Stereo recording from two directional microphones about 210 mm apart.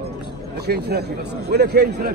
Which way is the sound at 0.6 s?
50° right (ahead or behind).